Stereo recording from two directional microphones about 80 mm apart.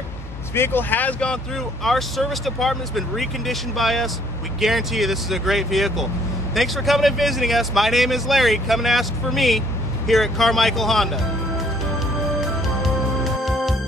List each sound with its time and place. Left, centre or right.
0.6 s speech: left
1.9 s speech: centre
12.4 s music: centre